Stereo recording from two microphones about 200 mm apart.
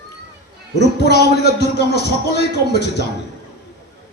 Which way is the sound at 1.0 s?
55° left (ahead or behind).